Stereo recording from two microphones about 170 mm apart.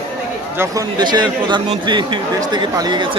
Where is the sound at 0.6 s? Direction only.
25° right (ahead or behind).